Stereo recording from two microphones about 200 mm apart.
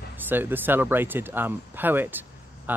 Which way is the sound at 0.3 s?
10° right (ahead or behind).